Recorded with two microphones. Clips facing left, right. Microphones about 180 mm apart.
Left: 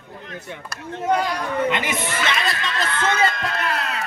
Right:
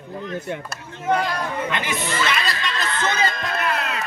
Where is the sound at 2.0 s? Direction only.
60° left (ahead or behind).